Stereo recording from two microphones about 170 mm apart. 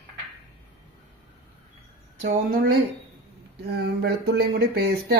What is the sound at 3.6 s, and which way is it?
Speech, 80° right.